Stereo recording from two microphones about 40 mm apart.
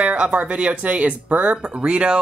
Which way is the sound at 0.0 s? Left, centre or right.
Right.